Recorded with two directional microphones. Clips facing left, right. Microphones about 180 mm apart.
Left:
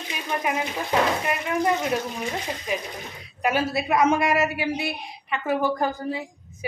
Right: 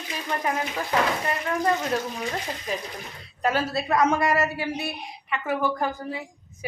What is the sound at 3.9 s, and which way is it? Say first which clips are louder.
Speech: left 1 dB; 25° left (ahead or behind).